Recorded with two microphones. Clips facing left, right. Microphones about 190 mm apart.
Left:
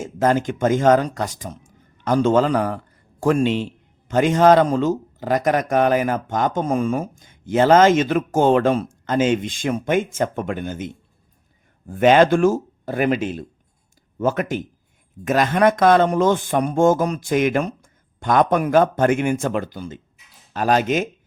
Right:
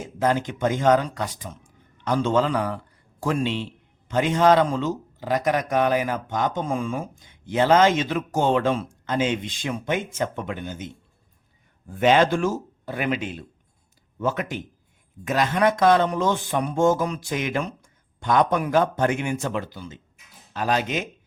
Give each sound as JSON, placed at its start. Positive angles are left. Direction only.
{"t": 0.0, "sound": "a man's voice", "side_deg": 45}
{"t": 11.9, "sound": "speech", "side_deg": 50}